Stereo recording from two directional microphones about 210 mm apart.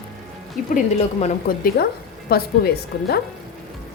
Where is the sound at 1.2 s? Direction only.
45° left (ahead or behind).